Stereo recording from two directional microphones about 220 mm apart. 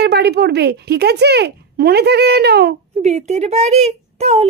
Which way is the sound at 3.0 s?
30° right (ahead or behind).